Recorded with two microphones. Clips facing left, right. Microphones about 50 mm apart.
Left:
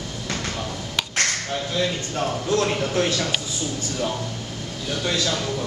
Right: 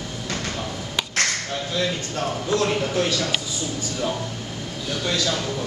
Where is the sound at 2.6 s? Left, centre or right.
Centre.